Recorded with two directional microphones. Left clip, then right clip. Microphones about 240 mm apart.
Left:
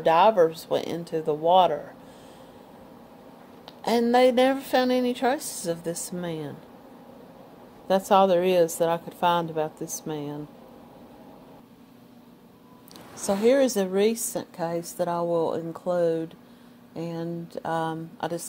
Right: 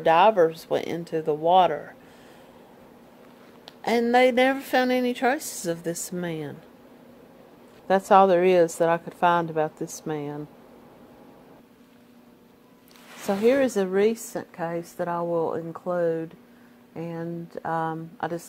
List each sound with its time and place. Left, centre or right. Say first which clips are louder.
0.0 s a woman's voice: right 1 dB; right
3.6 s a woman's voice: even; right
7.9 s a woman's voice: right 2 dB; right
13.3 s a woman's voice: even; right